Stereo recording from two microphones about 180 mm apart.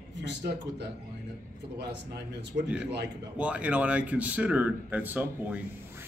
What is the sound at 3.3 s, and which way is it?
Speech, 5° right (ahead or behind).